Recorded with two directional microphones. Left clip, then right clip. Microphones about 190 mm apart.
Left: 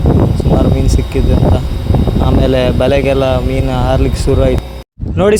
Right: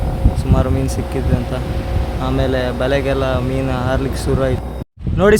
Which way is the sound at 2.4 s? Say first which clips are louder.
Left 6 dB; 25° left (ahead or behind).